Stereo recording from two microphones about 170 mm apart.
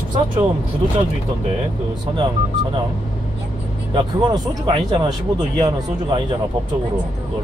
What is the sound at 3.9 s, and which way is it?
Speech, 25° right (ahead or behind).